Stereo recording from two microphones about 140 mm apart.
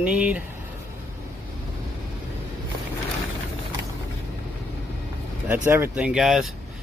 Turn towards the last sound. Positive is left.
turn(degrees=-5)  # may be behind; listen again after turning